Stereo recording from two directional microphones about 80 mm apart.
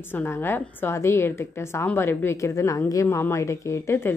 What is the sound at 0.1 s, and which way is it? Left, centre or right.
A woman's voice, left.